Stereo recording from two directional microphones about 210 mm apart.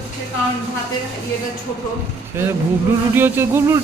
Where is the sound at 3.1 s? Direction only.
10° right (ahead or behind).